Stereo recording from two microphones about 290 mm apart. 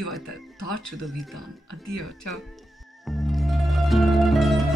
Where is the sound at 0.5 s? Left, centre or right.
Left.